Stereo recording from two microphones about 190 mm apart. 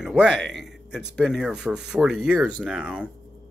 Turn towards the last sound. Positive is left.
turn(degrees=-5)  # may be behind; listen again after turning